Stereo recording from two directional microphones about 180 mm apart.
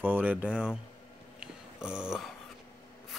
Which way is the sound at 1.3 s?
5° right (ahead or behind).